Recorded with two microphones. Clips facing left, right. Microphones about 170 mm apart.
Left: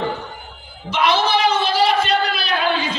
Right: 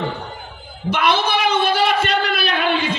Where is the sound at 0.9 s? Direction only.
55° right (ahead or behind).